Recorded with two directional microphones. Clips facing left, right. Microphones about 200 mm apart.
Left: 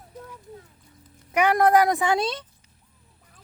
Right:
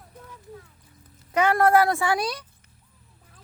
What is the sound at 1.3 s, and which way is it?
A woman's voice, 15° left (ahead or behind).